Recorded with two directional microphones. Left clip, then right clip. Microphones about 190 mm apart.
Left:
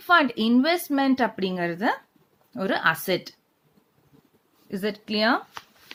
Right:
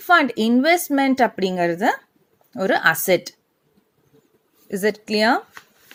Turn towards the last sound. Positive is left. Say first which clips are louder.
# right 5 dB
turn(degrees=-25)  # may be behind; listen again after turning